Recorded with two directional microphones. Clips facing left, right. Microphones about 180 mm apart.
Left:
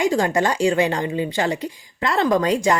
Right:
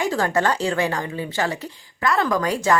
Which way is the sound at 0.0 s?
15° left (ahead or behind).